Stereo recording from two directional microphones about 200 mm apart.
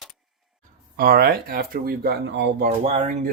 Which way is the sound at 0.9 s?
50° right (ahead or behind).